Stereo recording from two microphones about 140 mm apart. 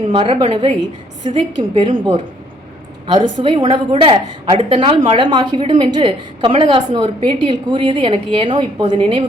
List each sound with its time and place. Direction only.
0.1 s a woman's voice: 35° right (ahead or behind)
3.1 s a woman's voice: 35° right (ahead or behind)